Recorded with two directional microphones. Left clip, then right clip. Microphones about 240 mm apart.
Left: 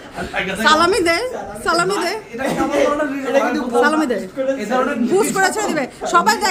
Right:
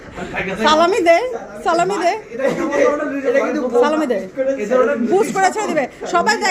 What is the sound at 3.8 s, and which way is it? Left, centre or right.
A woman's voice, centre.